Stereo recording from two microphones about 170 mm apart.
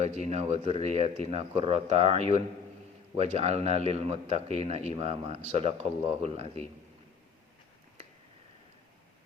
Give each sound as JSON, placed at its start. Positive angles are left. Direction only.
{"t": 0.0, "sound": "a man's voice", "side_deg": -40}